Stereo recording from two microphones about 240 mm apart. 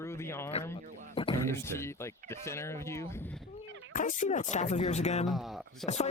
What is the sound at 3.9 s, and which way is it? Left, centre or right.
Speech, left.